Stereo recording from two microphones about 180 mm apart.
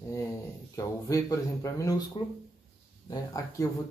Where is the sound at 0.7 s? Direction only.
15° left (ahead or behind).